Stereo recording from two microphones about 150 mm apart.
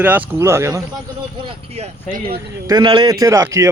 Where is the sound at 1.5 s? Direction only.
45° right (ahead or behind).